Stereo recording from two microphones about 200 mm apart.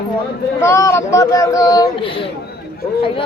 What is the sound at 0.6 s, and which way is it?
Speech, 15° left (ahead or behind).